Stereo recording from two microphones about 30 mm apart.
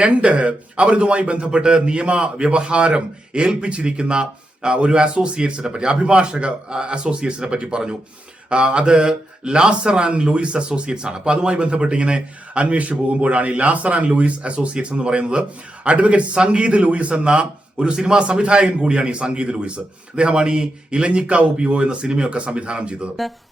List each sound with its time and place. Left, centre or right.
0.0 s speech: right
12.7 s a man's voice: right
16.0 s a man's voice: right
21.8 s speech: right